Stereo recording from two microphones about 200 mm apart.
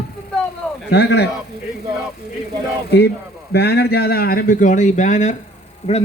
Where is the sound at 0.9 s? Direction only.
55° left (ahead or behind).